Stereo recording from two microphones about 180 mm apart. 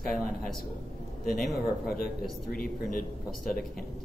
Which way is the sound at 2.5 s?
50° left (ahead or behind).